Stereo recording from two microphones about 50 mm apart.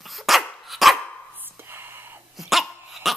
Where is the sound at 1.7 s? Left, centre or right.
Right.